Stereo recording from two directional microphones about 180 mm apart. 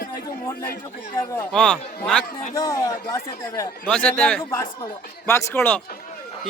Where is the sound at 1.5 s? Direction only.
5° left (ahead or behind).